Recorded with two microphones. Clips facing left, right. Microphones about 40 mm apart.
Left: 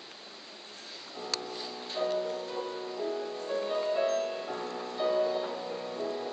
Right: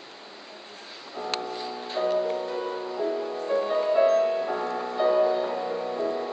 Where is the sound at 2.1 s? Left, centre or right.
Right.